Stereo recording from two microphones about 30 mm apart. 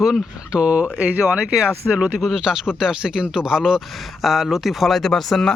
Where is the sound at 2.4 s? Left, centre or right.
Right.